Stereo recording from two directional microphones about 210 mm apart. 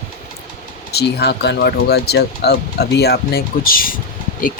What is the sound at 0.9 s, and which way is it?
Speech, 50° left (ahead or behind).